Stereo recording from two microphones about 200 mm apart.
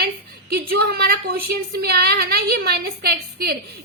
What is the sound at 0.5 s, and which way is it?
A woman's voice, 50° right (ahead or behind).